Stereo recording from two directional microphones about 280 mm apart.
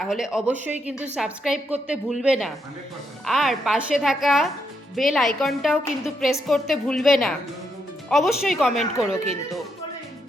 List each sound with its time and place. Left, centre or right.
0.0 s a woman's voice: centre
9.0 s speech: right